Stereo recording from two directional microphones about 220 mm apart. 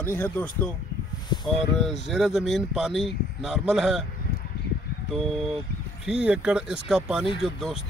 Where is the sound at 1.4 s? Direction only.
Centre (ahead or behind).